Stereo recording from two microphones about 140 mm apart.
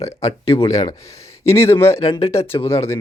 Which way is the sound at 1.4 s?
20° left (ahead or behind).